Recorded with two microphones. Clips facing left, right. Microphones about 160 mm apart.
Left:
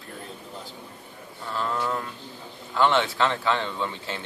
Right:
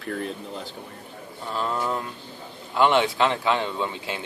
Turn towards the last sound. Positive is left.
turn(degrees=-15)  # may be behind; listen again after turning